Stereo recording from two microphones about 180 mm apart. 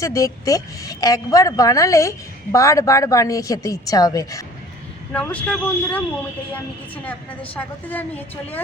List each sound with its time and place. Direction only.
0.0 s a woman's voice: 20° left (ahead or behind)
5.1 s a woman's voice: 5° left (ahead or behind)